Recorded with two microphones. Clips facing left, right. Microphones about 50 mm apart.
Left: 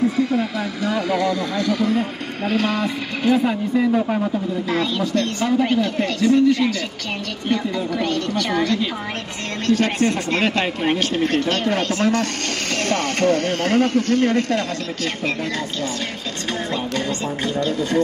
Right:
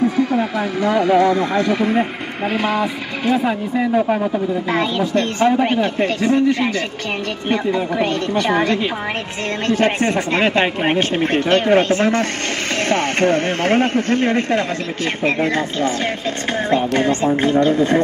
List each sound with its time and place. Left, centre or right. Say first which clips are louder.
0.1 s speech: right 3 dB; right
2.4 s speech: right 2 dB; centre; by 18.0 s right